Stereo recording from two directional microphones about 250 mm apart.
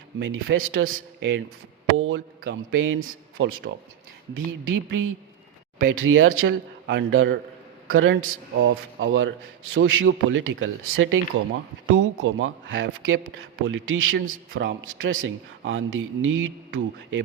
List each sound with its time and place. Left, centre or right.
0.2 s a man's voice: right